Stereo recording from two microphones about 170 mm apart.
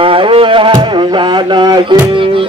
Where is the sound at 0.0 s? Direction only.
30° right (ahead or behind).